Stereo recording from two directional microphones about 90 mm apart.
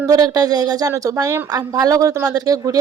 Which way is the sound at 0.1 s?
45° right (ahead or behind).